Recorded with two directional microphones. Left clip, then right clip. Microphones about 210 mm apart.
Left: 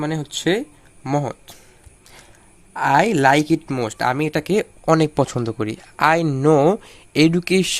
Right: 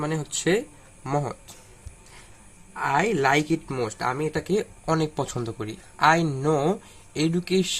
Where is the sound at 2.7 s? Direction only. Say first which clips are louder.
Left 7 dB; 45° left (ahead or behind).